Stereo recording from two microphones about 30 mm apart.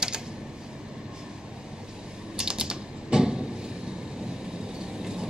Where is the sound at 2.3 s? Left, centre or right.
Right.